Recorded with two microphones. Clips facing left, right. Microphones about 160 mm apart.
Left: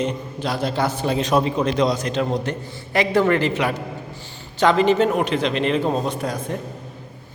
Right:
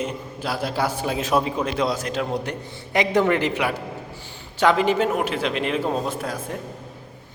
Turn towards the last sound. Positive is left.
turn(degrees=-5)  # may be behind; listen again after turning